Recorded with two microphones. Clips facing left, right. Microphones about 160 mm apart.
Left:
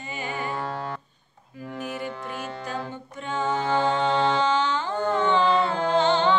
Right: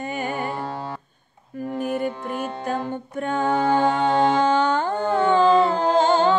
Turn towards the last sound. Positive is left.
turn(degrees=-40)  # may be behind; listen again after turning